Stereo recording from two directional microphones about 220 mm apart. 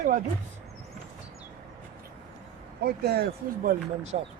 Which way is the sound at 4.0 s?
30° right (ahead or behind).